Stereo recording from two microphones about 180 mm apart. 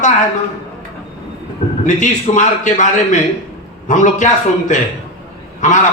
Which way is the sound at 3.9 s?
45° left (ahead or behind).